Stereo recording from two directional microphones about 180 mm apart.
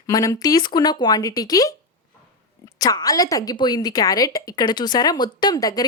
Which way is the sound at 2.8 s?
20° left (ahead or behind).